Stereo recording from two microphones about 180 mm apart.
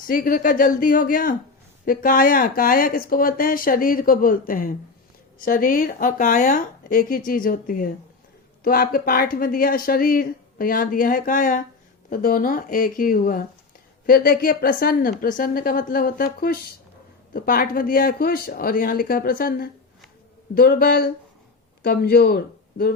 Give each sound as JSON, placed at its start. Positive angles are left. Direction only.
{"t": 0.1, "sound": "speech", "side_deg": 50}